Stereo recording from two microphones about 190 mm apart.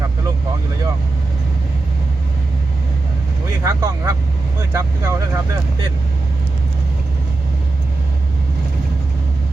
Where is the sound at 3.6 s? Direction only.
15° right (ahead or behind).